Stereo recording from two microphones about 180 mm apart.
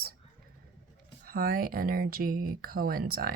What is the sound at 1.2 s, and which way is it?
Speech, 55° right (ahead or behind).